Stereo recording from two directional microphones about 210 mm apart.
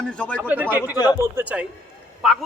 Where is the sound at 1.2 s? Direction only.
10° right (ahead or behind).